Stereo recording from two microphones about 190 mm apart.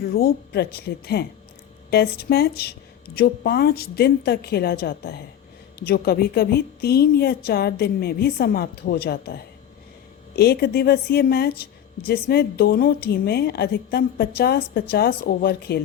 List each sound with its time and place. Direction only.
0.0 s a woman's voice: 55° left (ahead or behind)